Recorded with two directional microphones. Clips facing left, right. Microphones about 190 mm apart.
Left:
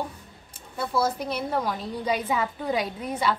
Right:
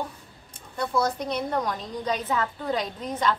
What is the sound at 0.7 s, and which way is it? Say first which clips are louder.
A woman's voice: even; 5° left (ahead or behind).